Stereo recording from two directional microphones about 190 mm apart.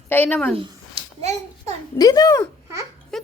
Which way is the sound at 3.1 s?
Centre (ahead or behind).